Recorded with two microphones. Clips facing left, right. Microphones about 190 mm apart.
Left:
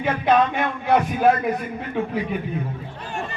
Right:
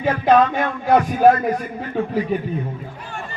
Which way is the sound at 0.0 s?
40° right (ahead or behind).